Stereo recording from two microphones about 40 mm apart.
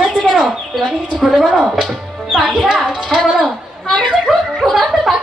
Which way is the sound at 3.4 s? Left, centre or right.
Centre.